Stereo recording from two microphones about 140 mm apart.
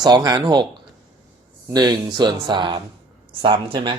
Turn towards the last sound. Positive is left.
turn(degrees=-35)  # may be behind; listen again after turning